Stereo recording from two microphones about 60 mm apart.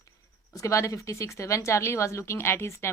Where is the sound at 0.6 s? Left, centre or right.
Left.